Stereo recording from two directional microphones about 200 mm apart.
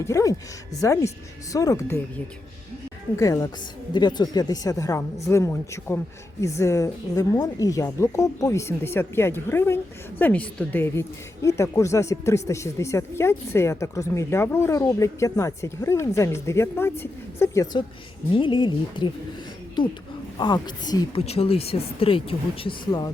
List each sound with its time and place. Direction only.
0.0 s speech: 15° left (ahead or behind)
3.2 s speech: 15° left (ahead or behind)